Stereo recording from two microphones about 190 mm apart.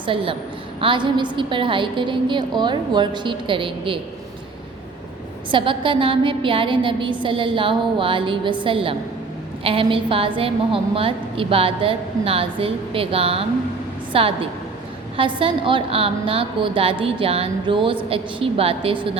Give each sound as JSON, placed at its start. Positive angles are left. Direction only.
{"t": 0.0, "sound": "a woman's voice", "side_deg": -25}
{"t": 5.5, "sound": "a woman's voice", "side_deg": -25}
{"t": 15.4, "sound": "a woman's voice", "side_deg": -25}